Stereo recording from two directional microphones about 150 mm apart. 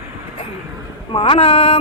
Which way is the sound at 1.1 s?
35° left (ahead or behind).